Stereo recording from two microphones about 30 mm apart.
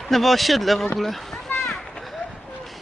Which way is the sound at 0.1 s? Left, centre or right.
Centre.